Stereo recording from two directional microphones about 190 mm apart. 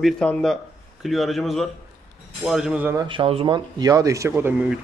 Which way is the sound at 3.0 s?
30° right (ahead or behind).